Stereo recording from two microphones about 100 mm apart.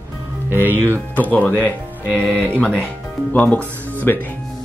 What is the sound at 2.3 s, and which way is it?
Speech, 20° right (ahead or behind).